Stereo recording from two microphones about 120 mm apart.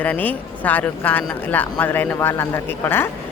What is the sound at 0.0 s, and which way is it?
Speech, 15° left (ahead or behind).